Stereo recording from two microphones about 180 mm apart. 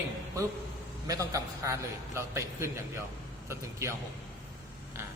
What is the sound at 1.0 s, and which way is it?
A man's voice, 20° right (ahead or behind).